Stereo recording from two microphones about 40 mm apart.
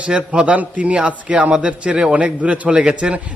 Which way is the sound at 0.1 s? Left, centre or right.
Right.